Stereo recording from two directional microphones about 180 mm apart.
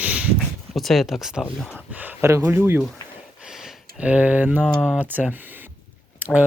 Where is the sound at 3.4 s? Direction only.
Centre (ahead or behind).